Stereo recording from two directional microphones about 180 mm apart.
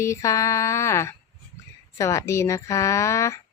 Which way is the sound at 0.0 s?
15° left (ahead or behind).